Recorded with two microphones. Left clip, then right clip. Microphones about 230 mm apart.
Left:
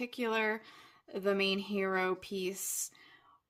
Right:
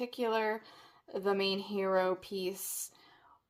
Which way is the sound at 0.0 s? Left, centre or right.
Left.